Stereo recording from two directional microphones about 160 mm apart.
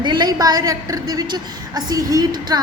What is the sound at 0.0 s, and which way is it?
A woman's voice, 30° right (ahead or behind).